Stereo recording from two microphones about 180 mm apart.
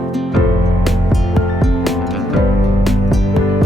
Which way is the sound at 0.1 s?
Centre (ahead or behind).